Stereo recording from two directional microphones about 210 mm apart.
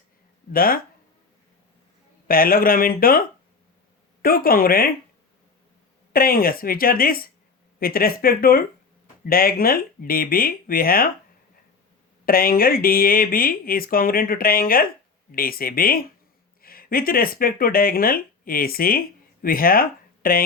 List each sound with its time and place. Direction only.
0.5 s speech: 45° left (ahead or behind)
2.2 s speech: 45° left (ahead or behind)
6.1 s speech: 45° left (ahead or behind)
12.2 s speech: 45° left (ahead or behind)